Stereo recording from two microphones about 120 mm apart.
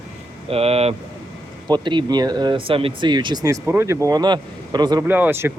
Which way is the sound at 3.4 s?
20° right (ahead or behind).